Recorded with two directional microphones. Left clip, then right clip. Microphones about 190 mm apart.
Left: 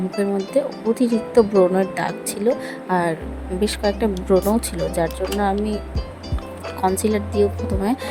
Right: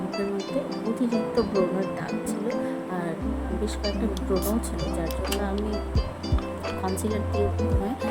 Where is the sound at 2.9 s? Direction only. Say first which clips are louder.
Left 11 dB; 50° left (ahead or behind).